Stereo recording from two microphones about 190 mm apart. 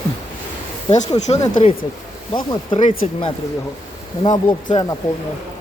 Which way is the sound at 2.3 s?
25° left (ahead or behind).